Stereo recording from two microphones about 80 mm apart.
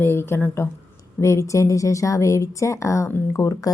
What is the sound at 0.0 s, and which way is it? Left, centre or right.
A woman's voice, left.